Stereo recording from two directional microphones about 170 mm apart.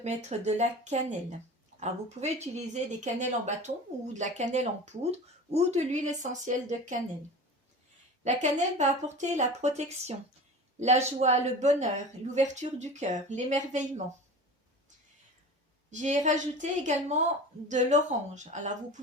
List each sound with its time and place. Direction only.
0.0 s speech: 40° right (ahead or behind)
8.2 s a man's voice: 45° right (ahead or behind)
15.9 s speech: 45° right (ahead or behind)